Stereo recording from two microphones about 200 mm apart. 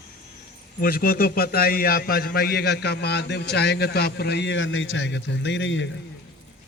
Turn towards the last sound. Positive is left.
turn(degrees=70)  # may be behind; listen again after turning